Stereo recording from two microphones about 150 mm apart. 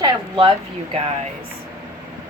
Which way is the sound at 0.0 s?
40° right (ahead or behind).